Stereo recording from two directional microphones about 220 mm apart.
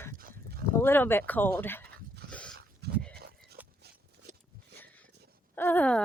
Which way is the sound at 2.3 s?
5° left (ahead or behind).